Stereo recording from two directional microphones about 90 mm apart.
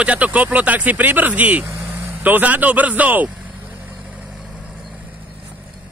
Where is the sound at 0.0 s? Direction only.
15° right (ahead or behind).